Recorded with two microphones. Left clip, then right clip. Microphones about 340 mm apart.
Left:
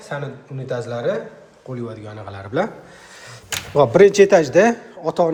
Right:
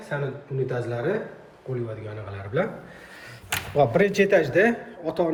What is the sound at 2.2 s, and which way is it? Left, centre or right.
Speech, centre.